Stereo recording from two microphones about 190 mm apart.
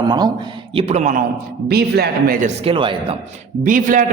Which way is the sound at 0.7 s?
35° right (ahead or behind).